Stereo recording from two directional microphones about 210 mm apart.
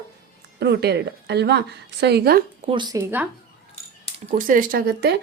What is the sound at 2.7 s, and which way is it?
Speech, 20° right (ahead or behind).